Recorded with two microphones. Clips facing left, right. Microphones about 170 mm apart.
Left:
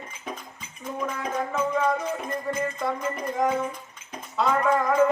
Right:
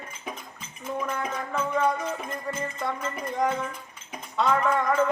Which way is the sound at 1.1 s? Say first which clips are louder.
Left 2 dB; 5° left (ahead or behind).